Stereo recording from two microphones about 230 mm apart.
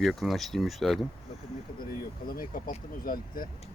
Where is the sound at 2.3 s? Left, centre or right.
Left.